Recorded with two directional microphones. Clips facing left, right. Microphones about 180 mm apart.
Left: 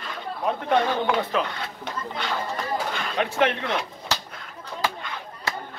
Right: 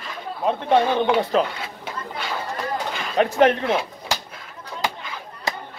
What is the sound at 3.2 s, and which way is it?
Speech, 40° right (ahead or behind).